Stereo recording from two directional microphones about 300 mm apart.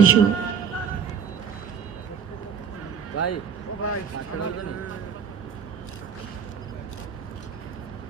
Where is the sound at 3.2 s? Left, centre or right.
Left.